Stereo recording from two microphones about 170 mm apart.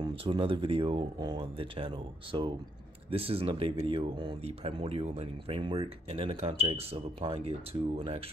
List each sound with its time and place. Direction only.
0.0 s speech: 30° right (ahead or behind)